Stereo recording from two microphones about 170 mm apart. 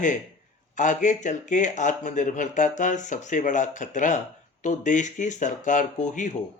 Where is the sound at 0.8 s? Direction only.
45° left (ahead or behind).